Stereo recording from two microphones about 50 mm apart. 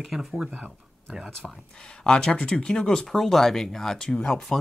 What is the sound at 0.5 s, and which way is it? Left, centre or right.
Speech, right.